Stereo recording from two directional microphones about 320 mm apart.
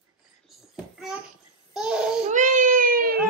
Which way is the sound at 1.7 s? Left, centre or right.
Centre.